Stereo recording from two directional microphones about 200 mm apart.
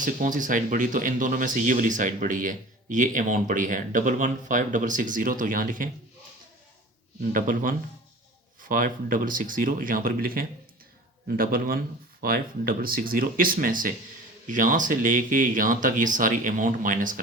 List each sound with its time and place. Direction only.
0.0 s speech: 40° right (ahead or behind)
7.2 s speech: 40° right (ahead or behind)